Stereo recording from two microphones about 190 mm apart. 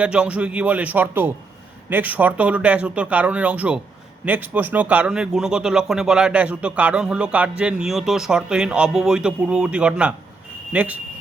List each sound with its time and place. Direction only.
0.0 s speech: 5° right (ahead or behind)